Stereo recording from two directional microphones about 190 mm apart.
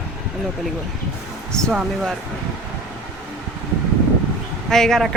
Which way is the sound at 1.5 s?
Centre (ahead or behind).